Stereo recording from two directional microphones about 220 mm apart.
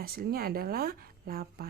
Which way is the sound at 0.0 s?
45° right (ahead or behind).